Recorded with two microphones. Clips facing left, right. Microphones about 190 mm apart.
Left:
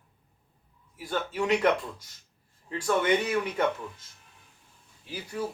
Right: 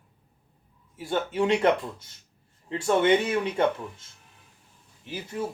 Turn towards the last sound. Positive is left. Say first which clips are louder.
# right 2 dB
turn(degrees=-20)  # may be behind; listen again after turning